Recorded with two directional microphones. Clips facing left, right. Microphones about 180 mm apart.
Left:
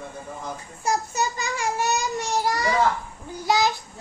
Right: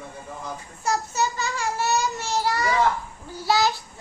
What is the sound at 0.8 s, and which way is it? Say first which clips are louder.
Child singing: even; 15° left (ahead or behind).